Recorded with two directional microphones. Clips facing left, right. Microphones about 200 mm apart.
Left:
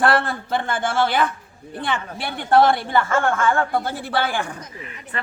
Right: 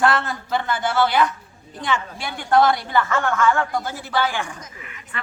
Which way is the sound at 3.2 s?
30° left (ahead or behind).